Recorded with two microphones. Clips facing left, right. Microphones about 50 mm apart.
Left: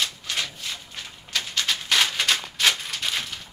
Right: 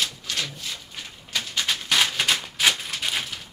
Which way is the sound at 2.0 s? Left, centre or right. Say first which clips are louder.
Even; centre.